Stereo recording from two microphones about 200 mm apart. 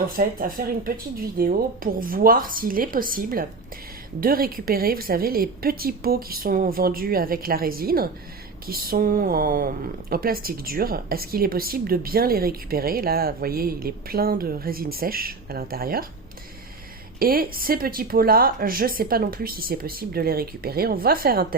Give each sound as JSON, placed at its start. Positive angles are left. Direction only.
{"t": 0.3, "sound": "speech", "side_deg": -45}
{"t": 17.2, "sound": "speech", "side_deg": -45}